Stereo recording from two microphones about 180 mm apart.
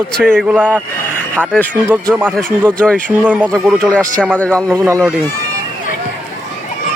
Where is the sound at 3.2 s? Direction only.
10° right (ahead or behind).